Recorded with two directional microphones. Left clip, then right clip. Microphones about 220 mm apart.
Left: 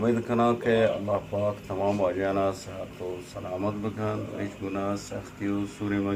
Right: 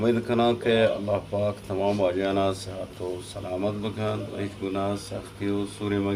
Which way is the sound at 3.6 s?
25° right (ahead or behind).